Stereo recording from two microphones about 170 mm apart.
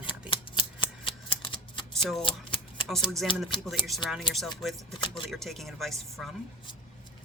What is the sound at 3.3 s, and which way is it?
Speech, 30° left (ahead or behind).